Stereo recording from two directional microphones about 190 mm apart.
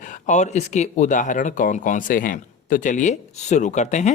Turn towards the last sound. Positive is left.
turn(degrees=40)  # may be behind; listen again after turning